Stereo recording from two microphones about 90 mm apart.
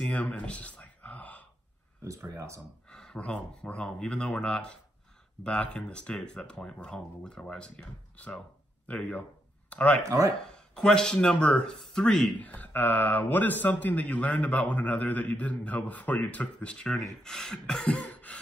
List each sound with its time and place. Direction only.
0.0 s a sound: 15° left (ahead or behind)
2.3 s speech: 35° right (ahead or behind)
2.9 s a man's voice: 10° left (ahead or behind)
10.0 s speech: 35° right (ahead or behind)
10.4 s a man's voice: 10° left (ahead or behind)
12.4 s a man's voice: 20° left (ahead or behind)